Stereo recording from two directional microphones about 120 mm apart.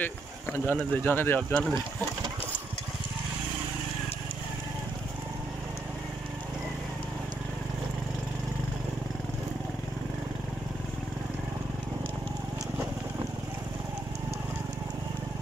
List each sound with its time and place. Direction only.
0.0 s speech: 15° left (ahead or behind)